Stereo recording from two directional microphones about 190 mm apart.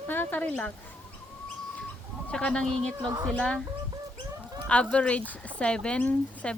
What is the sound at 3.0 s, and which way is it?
Speech, 20° right (ahead or behind).